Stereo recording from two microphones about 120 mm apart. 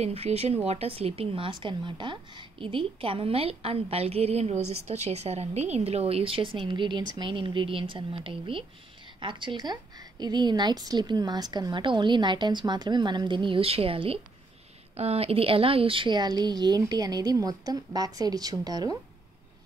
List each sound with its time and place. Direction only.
0.0 s a woman's voice: 60° right (ahead or behind); by 18.9 s 35° right (ahead or behind)